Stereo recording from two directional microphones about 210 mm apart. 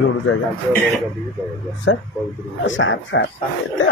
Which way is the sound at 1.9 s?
65° left (ahead or behind).